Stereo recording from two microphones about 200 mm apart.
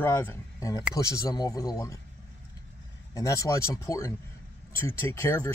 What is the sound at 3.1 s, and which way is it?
Speech, 15° left (ahead or behind).